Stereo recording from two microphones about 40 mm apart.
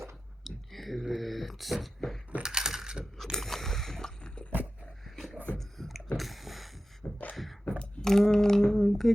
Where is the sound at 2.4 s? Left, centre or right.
Centre.